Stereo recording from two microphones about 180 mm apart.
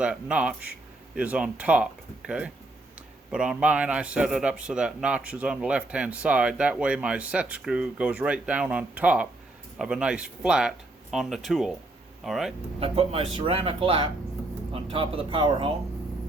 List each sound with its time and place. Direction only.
0.0 s a man's voice: 5° right (ahead or behind)
12.8 s speech: 35° right (ahead or behind)